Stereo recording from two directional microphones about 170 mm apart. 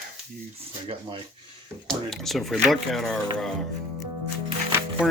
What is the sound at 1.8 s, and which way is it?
Speech, centre (ahead or behind).